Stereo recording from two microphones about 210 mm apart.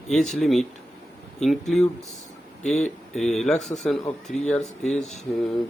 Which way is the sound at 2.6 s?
35° left (ahead or behind).